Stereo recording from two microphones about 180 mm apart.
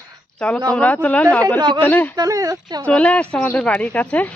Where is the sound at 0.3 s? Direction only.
5° left (ahead or behind).